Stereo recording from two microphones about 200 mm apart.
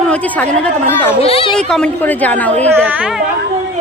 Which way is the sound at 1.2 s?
30° left (ahead or behind).